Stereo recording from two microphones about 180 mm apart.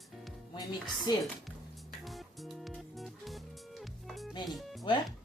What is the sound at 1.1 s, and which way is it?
Speech, 20° left (ahead or behind).